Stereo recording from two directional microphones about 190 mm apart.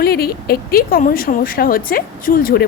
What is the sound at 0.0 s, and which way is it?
Speech, 55° left (ahead or behind).